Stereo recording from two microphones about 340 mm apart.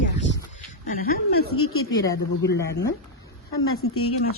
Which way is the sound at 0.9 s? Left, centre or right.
Left.